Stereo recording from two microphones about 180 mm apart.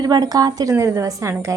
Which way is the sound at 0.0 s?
20° right (ahead or behind).